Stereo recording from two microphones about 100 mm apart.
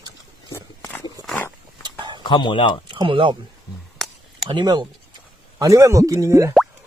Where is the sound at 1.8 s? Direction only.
50° right (ahead or behind).